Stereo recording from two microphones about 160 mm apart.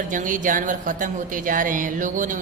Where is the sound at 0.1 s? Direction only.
55° right (ahead or behind).